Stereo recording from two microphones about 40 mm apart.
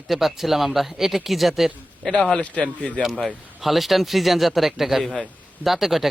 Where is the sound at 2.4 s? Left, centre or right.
Left.